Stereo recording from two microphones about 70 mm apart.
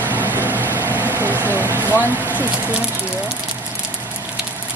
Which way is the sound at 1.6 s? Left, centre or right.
Right.